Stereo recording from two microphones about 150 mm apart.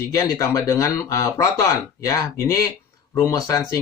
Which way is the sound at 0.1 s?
20° left (ahead or behind).